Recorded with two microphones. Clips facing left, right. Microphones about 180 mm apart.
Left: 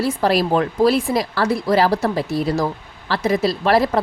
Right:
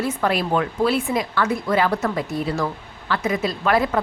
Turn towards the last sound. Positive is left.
turn(degrees=35)  # may be behind; listen again after turning